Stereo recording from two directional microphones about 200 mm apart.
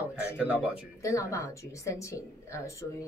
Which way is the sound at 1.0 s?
15° left (ahead or behind).